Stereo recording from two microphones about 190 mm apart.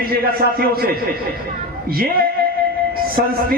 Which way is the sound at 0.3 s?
50° right (ahead or behind).